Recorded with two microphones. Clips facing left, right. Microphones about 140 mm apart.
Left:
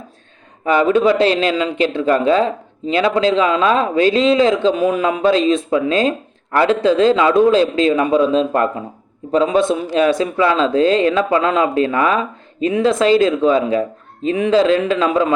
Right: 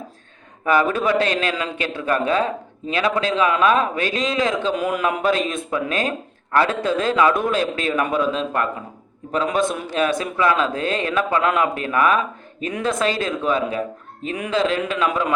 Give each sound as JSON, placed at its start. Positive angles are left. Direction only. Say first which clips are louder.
{"t": 0.6, "sound": "a man's voice", "louder": "left 5 dB", "side_deg": 25}